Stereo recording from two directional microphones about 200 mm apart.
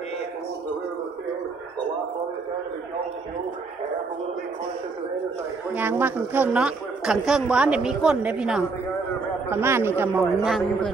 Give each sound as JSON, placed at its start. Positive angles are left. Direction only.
{"t": 5.8, "sound": "a woman's voice", "side_deg": -10}
{"t": 10.4, "sound": "a woman's voice", "side_deg": 0}